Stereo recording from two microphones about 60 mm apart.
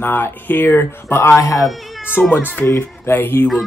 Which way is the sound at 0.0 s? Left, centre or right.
Left.